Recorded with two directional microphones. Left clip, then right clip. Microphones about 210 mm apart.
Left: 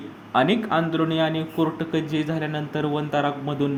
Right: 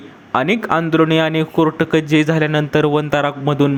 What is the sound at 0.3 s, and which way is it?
A man's voice, 35° right (ahead or behind).